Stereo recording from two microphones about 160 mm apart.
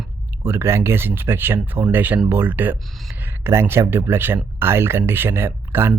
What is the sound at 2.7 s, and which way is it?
Speech, centre (ahead or behind).